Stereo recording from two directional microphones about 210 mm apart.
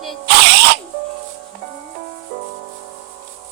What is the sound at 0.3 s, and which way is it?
Drill, 50° right (ahead or behind).